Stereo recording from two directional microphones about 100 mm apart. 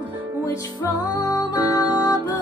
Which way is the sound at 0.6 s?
40° left (ahead or behind).